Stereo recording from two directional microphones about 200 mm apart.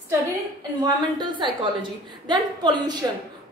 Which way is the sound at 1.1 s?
20° right (ahead or behind).